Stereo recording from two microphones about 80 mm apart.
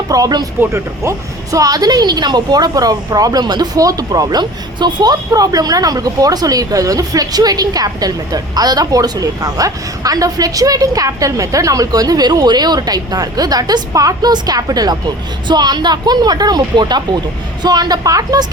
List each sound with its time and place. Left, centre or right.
0.1 s speech: right
0.7 s speech: right
5.3 s speech: right